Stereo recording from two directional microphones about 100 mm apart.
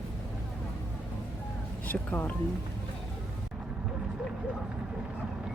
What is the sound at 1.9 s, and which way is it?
Speech, 20° left (ahead or behind).